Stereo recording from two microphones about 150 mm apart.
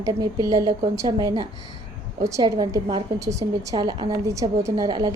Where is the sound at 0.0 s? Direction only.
25° right (ahead or behind).